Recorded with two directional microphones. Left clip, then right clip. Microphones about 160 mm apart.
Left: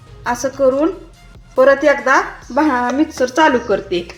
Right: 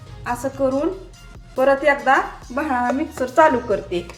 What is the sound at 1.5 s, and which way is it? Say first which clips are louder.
A woman's voice: left 5 dB; 60° left (ahead or behind).